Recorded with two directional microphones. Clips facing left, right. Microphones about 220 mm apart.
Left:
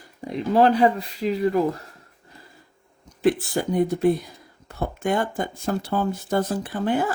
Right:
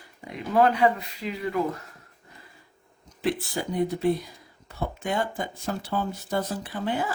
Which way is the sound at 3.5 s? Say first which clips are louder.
Left 5 dB; 50° left (ahead or behind).